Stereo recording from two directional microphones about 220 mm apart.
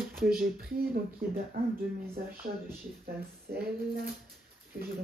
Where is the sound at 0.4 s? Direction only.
40° right (ahead or behind).